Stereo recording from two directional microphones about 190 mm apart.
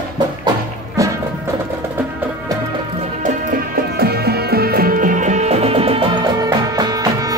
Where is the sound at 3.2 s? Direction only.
50° right (ahead or behind).